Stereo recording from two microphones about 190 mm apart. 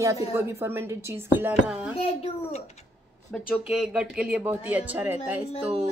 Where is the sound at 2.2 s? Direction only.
35° left (ahead or behind).